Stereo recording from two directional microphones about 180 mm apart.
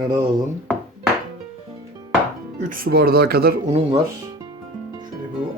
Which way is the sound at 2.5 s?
45° right (ahead or behind).